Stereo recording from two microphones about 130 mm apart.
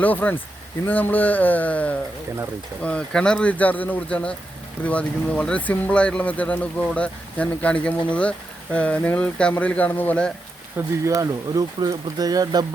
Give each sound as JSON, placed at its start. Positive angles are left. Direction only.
{"t": 0.0, "sound": "speech", "side_deg": 15}
{"t": 10.8, "sound": "speech", "side_deg": -25}